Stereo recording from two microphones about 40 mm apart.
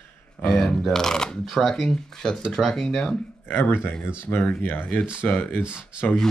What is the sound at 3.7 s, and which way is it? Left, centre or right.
Speech, left.